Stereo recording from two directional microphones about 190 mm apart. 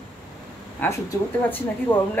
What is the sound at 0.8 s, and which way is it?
A woman's voice, 15° left (ahead or behind).